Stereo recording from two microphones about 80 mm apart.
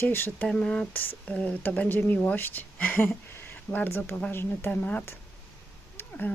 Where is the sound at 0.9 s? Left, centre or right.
Left.